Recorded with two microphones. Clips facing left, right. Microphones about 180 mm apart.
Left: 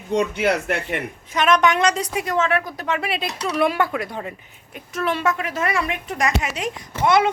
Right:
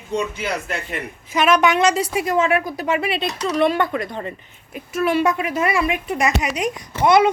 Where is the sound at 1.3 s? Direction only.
10° right (ahead or behind).